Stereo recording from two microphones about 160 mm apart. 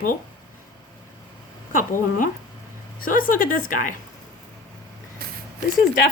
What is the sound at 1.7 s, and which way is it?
Speech, 55° left (ahead or behind).